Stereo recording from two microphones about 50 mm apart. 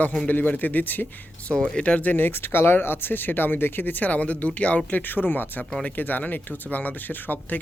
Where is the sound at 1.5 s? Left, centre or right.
Centre.